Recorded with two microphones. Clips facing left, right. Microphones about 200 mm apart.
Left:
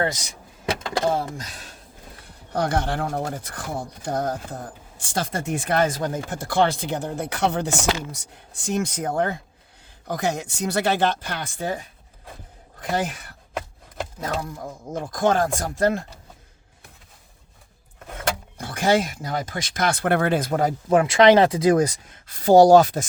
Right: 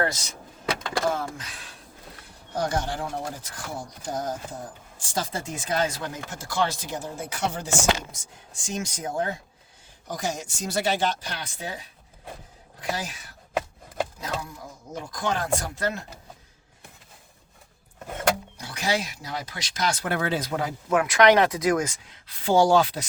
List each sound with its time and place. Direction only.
0.0 s speech: 20° left (ahead or behind); by 1.6 s 40° left (ahead or behind)
2.5 s speech: 60° left (ahead or behind)
18.5 s speech: 50° left (ahead or behind)